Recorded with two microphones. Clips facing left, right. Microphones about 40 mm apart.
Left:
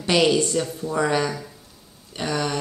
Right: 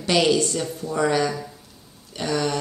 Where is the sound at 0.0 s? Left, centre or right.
Centre.